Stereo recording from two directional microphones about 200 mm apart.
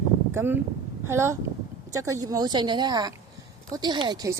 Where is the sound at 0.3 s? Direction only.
10° right (ahead or behind).